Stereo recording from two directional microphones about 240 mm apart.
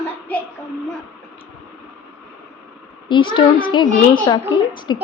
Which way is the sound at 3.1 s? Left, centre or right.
Centre.